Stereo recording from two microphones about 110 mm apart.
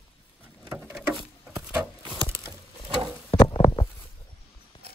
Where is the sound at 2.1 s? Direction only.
25° right (ahead or behind).